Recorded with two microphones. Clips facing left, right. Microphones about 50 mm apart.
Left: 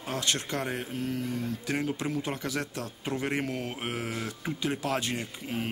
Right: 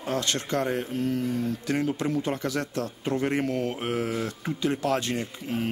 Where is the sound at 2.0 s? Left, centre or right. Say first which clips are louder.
Right 5 dB; centre.